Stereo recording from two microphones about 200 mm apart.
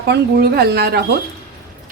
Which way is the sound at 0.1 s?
55° right (ahead or behind).